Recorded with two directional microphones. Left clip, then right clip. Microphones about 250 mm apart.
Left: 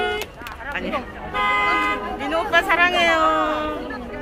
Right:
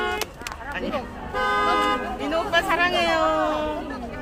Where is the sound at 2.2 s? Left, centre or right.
Centre.